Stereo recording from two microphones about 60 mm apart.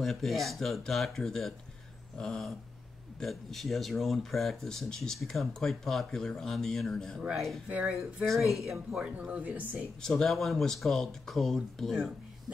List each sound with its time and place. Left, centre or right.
0.0 s speech: centre
2.1 s dog: centre
3.2 s speech: centre
7.7 s speech: centre
8.3 s speech: centre
9.0 s speech: right
10.0 s speech: centre